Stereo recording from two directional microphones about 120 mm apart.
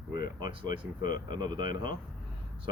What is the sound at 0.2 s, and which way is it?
Speech, 35° right (ahead or behind).